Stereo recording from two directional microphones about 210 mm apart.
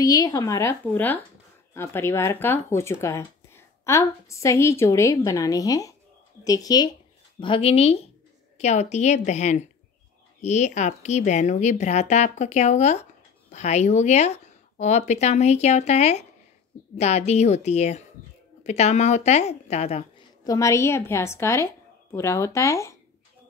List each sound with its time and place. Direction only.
0.0 s a woman's voice: 15° left (ahead or behind)
20.4 s speech: 15° left (ahead or behind)